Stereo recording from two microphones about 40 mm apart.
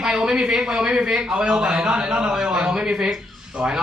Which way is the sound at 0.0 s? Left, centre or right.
Centre.